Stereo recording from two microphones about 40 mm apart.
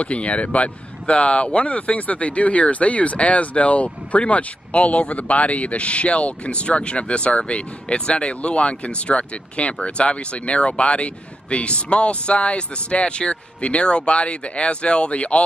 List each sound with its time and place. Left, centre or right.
0.0 s speech: left